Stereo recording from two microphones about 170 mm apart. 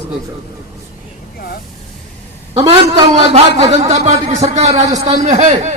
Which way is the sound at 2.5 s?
35° right (ahead or behind).